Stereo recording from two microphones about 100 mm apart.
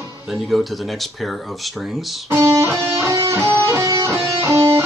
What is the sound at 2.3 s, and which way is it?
Music, 25° right (ahead or behind).